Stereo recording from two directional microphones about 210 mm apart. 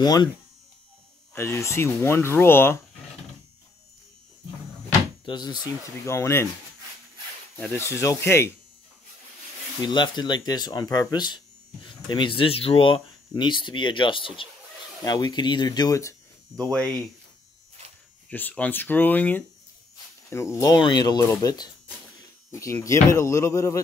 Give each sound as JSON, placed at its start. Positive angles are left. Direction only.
{"t": 0.0, "sound": "speech", "side_deg": 20}
{"t": 1.3, "sound": "speech", "side_deg": 10}
{"t": 5.2, "sound": "speech", "side_deg": 20}
{"t": 7.6, "sound": "speech", "side_deg": 10}
{"t": 9.8, "sound": "speech", "side_deg": 20}
{"t": 16.7, "sound": "speech", "side_deg": 0}
{"t": 18.3, "sound": "speech", "side_deg": 5}